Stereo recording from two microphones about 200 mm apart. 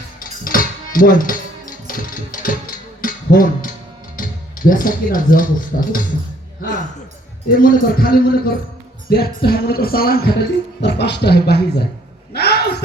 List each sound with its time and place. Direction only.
0.2 s music: 45° left (ahead or behind)
3.0 s a sound: 45° left (ahead or behind)
4.2 s speech: 45° left (ahead or behind)
5.7 s music: 45° left (ahead or behind)
6.6 s speech: 40° left (ahead or behind)
7.5 s music: 45° left (ahead or behind)
12.3 s a sound: 55° left (ahead or behind)